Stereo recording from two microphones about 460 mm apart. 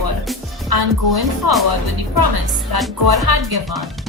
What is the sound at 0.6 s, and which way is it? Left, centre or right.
Speech, right.